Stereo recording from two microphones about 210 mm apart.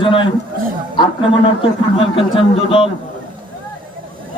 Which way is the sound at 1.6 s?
25° left (ahead or behind).